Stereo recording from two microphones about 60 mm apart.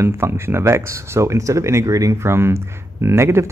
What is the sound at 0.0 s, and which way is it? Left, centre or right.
Speech, right.